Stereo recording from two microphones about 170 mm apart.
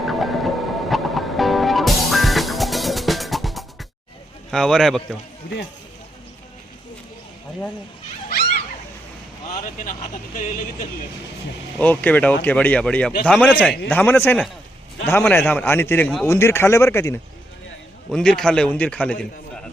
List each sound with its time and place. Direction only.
0.1 s music: centre (ahead or behind)
4.5 s a man's voice: centre (ahead or behind)
9.5 s speech: 45° left (ahead or behind)
11.8 s a man's voice: 10° left (ahead or behind)
18.1 s a man's voice: 5° left (ahead or behind)